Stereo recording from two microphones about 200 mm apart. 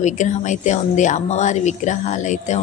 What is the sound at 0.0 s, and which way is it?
A woman's voice, 35° left (ahead or behind).